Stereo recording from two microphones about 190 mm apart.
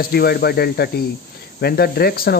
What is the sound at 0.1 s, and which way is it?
Speech, 55° left (ahead or behind).